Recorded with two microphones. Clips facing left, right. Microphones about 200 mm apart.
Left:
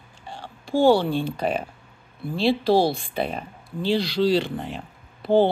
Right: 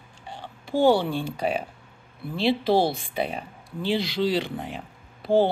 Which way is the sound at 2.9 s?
10° right (ahead or behind).